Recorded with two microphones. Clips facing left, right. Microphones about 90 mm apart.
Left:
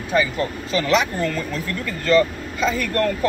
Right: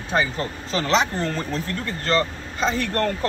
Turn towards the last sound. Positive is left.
turn(degrees=-30)  # may be behind; listen again after turning